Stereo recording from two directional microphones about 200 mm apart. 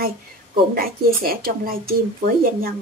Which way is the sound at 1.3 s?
45° right (ahead or behind).